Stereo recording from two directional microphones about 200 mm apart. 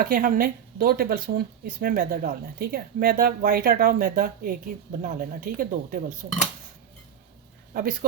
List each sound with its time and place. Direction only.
0.0 s speech: 45° right (ahead or behind)
7.7 s speech: 45° right (ahead or behind)